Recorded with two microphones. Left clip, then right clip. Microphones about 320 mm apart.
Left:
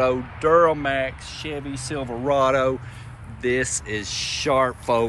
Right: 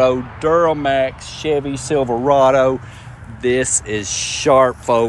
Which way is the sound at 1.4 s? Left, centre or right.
Centre.